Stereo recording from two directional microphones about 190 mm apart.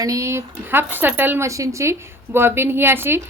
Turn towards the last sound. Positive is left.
turn(degrees=-10)  # may be behind; listen again after turning